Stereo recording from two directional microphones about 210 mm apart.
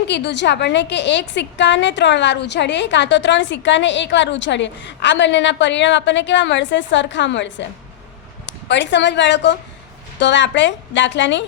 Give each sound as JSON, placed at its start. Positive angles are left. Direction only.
{"t": 0.1, "sound": "a woman's voice", "side_deg": 55}